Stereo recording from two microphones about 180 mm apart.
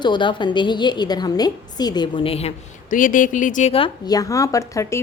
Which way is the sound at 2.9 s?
50° left (ahead or behind).